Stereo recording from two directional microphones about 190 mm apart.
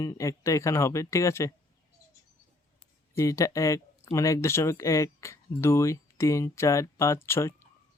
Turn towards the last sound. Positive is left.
turn(degrees=15)  # may be behind; listen again after turning